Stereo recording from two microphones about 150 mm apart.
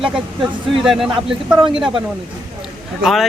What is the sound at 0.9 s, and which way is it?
Speech, centre (ahead or behind).